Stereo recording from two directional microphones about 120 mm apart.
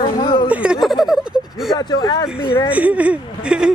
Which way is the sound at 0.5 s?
10° right (ahead or behind).